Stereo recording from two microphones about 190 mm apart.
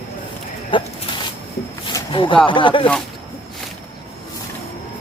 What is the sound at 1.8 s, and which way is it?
Speech, 25° left (ahead or behind).